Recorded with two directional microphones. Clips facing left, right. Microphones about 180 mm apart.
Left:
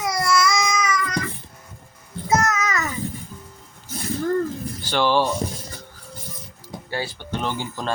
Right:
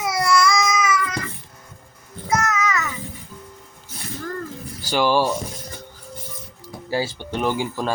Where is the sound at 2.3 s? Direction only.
40° left (ahead or behind).